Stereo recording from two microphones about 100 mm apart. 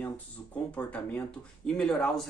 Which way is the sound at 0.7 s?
15° left (ahead or behind).